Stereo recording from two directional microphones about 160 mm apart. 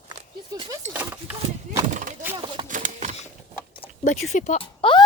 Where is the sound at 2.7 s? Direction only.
55° right (ahead or behind).